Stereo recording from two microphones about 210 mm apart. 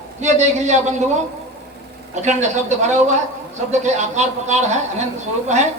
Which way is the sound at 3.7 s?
35° right (ahead or behind).